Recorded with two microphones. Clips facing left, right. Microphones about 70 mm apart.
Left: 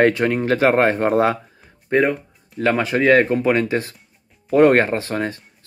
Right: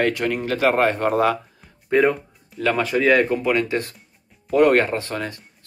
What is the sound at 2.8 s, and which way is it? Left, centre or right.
Speech, left.